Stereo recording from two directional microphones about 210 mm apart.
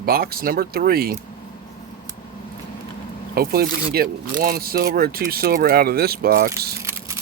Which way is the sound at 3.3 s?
45° right (ahead or behind).